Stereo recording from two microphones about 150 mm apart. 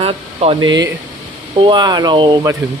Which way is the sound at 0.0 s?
40° right (ahead or behind).